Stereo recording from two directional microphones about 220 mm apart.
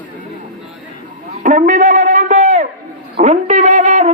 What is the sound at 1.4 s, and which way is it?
Music, 35° right (ahead or behind).